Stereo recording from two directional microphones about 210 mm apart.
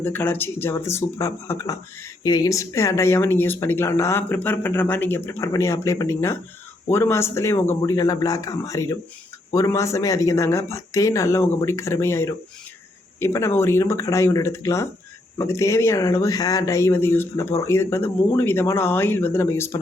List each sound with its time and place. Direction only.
0.0 s speech: 10° left (ahead or behind)